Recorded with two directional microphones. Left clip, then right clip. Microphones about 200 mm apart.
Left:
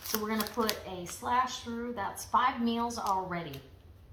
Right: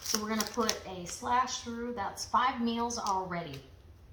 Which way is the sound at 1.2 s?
20° left (ahead or behind).